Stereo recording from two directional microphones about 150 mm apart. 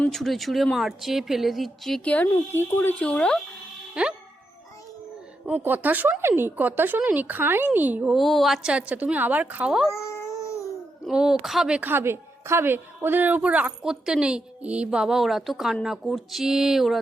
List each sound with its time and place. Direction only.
0.0 s a woman's voice: centre (ahead or behind)
4.0 s a woman's voice: 5° right (ahead or behind)
5.5 s speech: 10° right (ahead or behind)
8.1 s speech: centre (ahead or behind)
9.9 s baby cry: 20° left (ahead or behind)
11.0 s a woman's voice: 5° right (ahead or behind)